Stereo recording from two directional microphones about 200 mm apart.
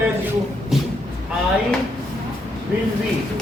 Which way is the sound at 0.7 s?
Centre (ahead or behind).